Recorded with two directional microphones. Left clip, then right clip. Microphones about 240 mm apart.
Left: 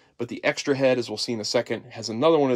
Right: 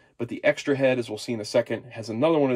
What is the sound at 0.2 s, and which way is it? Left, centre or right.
Speech, centre.